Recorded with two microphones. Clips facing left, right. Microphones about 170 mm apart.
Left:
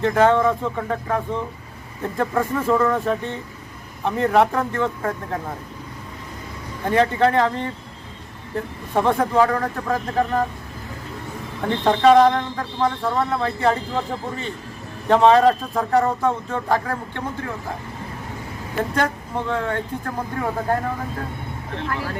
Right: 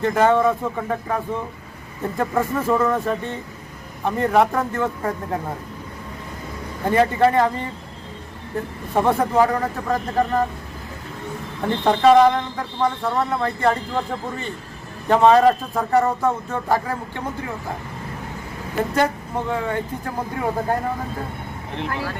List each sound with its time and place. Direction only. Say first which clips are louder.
0.0 s a man's voice: even; 5° right (ahead or behind)
6.8 s a man's voice: right 1 dB; 5° right (ahead or behind)
11.6 s a man's voice: even; centre (ahead or behind)
18.9 s speech: right 3 dB; 10° right (ahead or behind)
21.8 s speech: right 1 dB; 20° right (ahead or behind)